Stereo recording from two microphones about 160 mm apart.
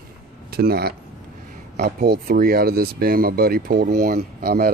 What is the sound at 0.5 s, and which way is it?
Speech, 75° right (ahead or behind).